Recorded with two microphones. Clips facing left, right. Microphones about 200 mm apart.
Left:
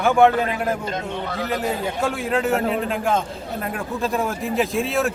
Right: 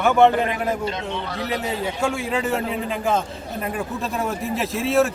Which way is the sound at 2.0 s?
Centre (ahead or behind).